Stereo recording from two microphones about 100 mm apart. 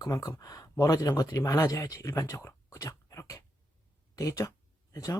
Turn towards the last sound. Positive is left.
turn(degrees=35)  # may be behind; listen again after turning